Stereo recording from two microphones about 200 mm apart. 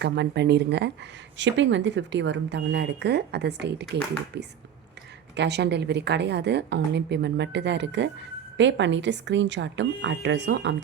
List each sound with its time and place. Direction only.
0.0 s a woman's voice: 60° right (ahead or behind)